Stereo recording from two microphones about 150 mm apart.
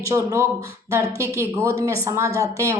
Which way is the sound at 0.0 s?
20° right (ahead or behind).